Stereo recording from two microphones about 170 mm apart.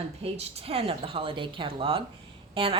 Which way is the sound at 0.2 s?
35° right (ahead or behind).